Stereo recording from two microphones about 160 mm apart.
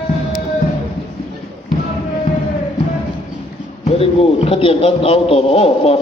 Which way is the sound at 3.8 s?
40° left (ahead or behind).